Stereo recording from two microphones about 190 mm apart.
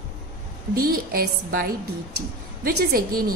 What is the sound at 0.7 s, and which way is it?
A woman's voice, 50° right (ahead or behind).